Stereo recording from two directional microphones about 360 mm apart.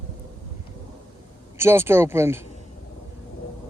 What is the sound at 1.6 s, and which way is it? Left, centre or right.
Speech, centre.